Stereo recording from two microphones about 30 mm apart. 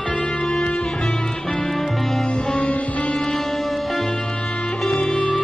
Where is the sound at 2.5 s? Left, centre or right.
Left.